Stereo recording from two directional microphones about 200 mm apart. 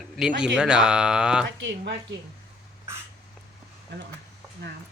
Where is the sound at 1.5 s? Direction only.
65° right (ahead or behind).